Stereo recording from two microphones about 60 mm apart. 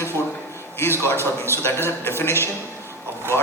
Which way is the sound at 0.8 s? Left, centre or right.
Left.